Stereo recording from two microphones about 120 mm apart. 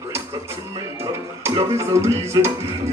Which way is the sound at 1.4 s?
25° right (ahead or behind).